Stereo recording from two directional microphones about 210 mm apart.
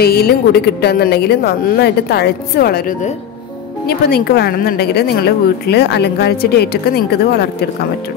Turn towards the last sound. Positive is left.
turn(degrees=50)  # may be behind; listen again after turning